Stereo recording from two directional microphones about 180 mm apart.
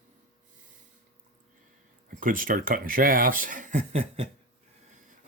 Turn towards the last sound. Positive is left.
turn(degrees=-35)  # may be behind; listen again after turning